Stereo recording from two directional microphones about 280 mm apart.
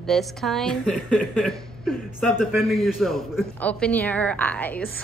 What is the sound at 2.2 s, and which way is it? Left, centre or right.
A man's voice, centre.